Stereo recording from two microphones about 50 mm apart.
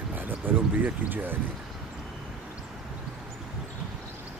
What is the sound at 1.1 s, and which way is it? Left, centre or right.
Speech, right.